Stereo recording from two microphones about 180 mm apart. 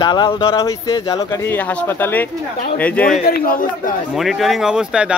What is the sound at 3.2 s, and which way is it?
Speech, 55° left (ahead or behind).